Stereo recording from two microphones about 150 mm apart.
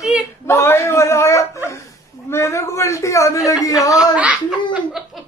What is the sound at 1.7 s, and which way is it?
Dog, 20° left (ahead or behind).